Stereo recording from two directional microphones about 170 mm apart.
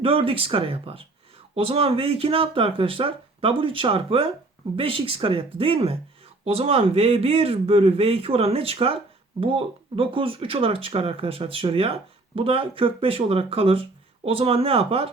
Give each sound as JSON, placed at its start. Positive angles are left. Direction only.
{"t": 0.0, "sound": "speech", "side_deg": -35}